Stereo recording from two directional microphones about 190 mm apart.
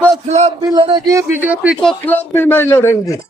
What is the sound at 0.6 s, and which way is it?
A man's voice, 25° right (ahead or behind).